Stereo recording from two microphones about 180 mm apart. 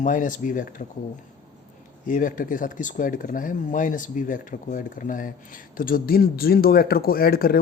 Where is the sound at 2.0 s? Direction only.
50° left (ahead or behind).